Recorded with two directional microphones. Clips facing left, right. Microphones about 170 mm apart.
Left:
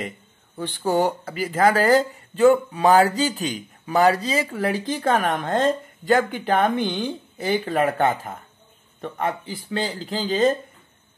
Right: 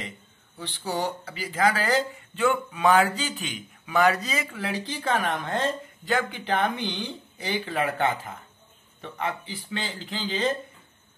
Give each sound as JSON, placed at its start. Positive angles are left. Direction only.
{"t": 0.6, "sound": "speech", "side_deg": 50}
{"t": 4.6, "sound": "speech", "side_deg": 45}